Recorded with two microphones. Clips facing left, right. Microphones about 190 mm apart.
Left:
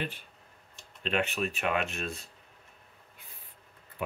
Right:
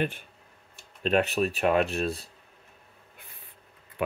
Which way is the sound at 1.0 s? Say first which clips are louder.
Right 6 dB; 40° right (ahead or behind).